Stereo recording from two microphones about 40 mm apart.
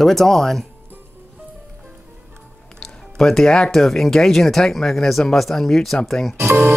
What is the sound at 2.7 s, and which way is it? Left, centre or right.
Music, centre.